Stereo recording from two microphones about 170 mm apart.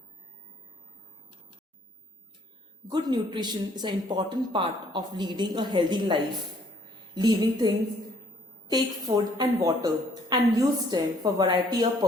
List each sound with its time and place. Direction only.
2.9 s a woman's voice: 25° right (ahead or behind)
8.7 s a woman's voice: 25° right (ahead or behind)